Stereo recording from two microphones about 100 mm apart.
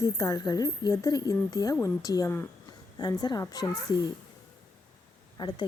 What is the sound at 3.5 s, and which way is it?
Speech, 40° left (ahead or behind).